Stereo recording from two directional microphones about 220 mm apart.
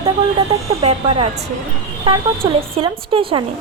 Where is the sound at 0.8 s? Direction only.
30° right (ahead or behind).